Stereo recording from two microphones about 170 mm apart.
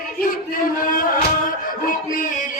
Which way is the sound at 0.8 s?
55° left (ahead or behind).